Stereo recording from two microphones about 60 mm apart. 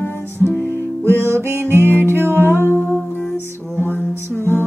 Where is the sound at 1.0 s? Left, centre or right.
Right.